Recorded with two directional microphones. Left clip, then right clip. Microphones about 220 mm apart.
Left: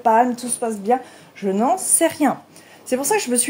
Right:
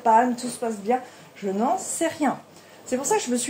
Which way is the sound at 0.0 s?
45° left (ahead or behind).